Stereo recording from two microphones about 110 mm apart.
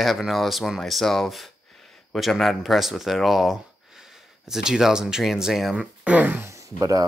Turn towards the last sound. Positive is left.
turn(degrees=-30)  # may be behind; listen again after turning